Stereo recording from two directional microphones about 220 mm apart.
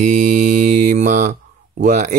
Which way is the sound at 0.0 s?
35° right (ahead or behind).